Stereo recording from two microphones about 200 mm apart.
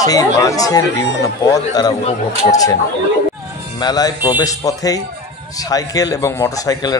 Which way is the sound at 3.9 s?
20° left (ahead or behind).